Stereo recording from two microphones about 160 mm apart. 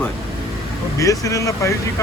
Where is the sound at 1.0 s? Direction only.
20° left (ahead or behind).